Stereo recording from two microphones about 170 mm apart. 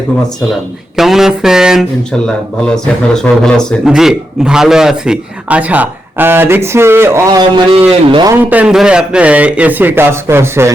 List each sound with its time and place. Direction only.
0.9 s a man's voice: centre (ahead or behind); by 8.4 s 25° right (ahead or behind)
8.4 s a man's voice: 5° right (ahead or behind)